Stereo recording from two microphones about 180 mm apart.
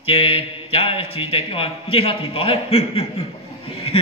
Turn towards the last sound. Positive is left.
turn(degrees=30)  # may be behind; listen again after turning